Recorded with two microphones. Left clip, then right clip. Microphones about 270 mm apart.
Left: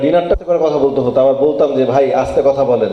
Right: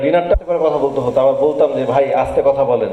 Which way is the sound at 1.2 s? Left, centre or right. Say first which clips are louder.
Left 1 dB; left.